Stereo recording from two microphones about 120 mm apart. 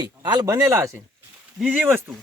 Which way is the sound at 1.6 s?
15° right (ahead or behind).